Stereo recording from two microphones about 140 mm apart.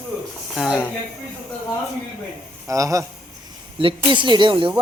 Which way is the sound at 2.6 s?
25° right (ahead or behind).